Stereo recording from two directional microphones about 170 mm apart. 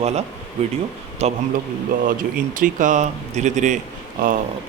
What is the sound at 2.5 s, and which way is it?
Speech, 50° right (ahead or behind).